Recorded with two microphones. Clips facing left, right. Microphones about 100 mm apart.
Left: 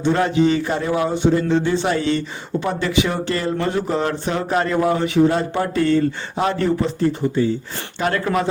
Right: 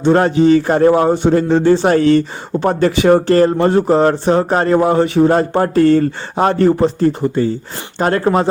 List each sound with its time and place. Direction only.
0.0 s a man's voice: 40° right (ahead or behind)